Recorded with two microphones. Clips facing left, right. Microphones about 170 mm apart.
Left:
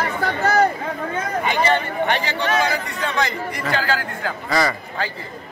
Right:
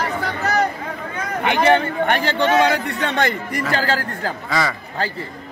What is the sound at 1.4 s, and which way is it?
Speech, 60° right (ahead or behind).